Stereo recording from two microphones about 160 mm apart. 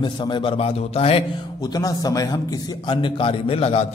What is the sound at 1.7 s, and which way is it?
A man's voice, 20° left (ahead or behind).